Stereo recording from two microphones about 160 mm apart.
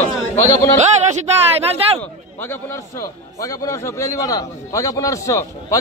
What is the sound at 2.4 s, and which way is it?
A man's voice, 15° left (ahead or behind).